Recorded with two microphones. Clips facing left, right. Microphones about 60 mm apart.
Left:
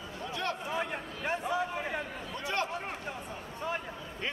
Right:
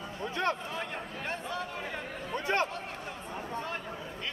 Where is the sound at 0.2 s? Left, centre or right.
Right.